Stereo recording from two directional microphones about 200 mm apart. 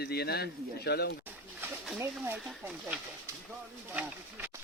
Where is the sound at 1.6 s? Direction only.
5° right (ahead or behind).